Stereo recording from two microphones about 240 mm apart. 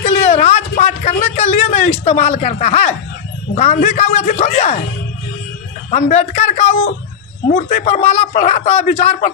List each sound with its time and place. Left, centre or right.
0.0 s a sound: left
3.5 s a man's voice: left
5.9 s a man's voice: left